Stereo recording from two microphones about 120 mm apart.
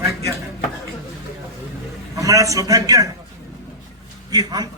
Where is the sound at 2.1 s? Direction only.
25° right (ahead or behind).